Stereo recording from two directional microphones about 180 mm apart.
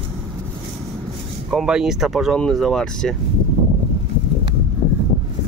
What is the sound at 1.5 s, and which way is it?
Speech, 5° right (ahead or behind).